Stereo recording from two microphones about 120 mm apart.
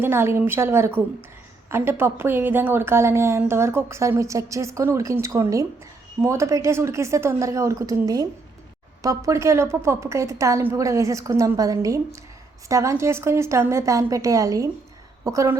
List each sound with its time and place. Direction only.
0.0 s a woman's voice: 20° right (ahead or behind)